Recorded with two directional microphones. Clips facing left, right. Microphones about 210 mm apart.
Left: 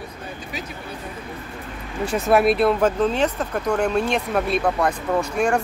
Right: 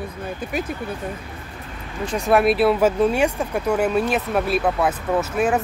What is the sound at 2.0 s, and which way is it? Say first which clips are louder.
Speech: even; 5° left (ahead or behind).